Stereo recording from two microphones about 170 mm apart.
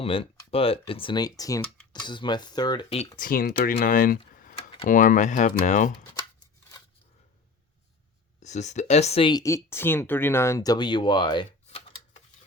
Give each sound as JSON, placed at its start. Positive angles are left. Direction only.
{"t": 0.0, "sound": "speech", "side_deg": 35}
{"t": 3.2, "sound": "speech", "side_deg": 55}
{"t": 4.4, "sound": "computer keyboard", "side_deg": 55}
{"t": 4.9, "sound": "speech", "side_deg": 50}
{"t": 8.4, "sound": "speech", "side_deg": 45}
{"t": 9.3, "sound": "speech", "side_deg": 20}